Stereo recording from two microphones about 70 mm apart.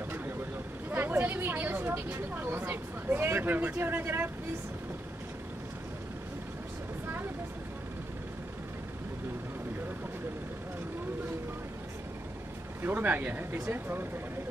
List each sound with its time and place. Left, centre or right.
0.8 s speech: right
12.8 s speech: right